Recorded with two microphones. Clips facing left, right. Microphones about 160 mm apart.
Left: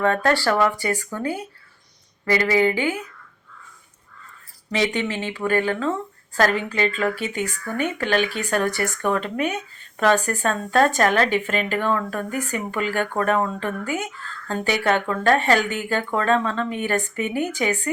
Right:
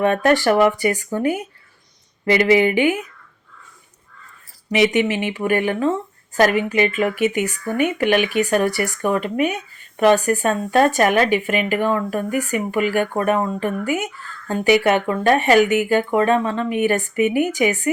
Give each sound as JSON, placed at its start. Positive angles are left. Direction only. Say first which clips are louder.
{"t": 0.0, "sound": "speech", "louder": "right 4 dB", "side_deg": -20}
{"t": 4.7, "sound": "speech", "louder": "right 6 dB", "side_deg": -15}